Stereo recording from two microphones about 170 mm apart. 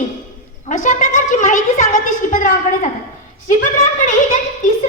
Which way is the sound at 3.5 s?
50° left (ahead or behind).